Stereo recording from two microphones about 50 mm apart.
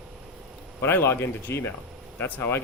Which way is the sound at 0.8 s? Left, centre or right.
Left.